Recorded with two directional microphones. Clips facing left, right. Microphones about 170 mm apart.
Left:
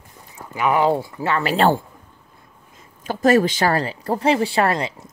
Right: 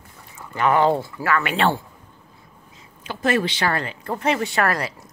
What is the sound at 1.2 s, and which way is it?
Speech, 30° left (ahead or behind).